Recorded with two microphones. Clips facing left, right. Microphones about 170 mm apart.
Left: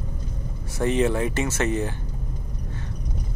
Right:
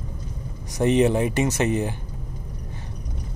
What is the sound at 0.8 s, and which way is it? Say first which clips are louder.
Speech: right 3 dB; 20° right (ahead or behind).